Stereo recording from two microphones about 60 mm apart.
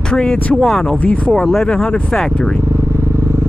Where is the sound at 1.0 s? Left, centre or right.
Left.